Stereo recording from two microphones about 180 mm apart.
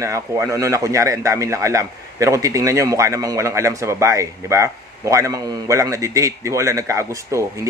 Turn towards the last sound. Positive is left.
turn(degrees=-15)  # may be behind; listen again after turning